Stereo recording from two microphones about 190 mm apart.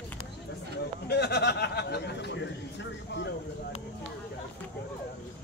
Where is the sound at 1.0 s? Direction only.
60° left (ahead or behind).